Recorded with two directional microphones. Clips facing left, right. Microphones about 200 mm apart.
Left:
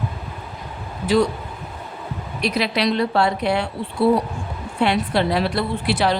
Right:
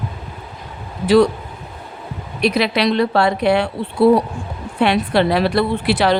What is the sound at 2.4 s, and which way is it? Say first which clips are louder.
Speech: right 4 dB; 70° right (ahead or behind).